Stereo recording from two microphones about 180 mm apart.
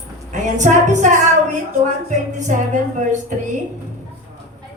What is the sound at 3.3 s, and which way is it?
Speech, 45° right (ahead or behind).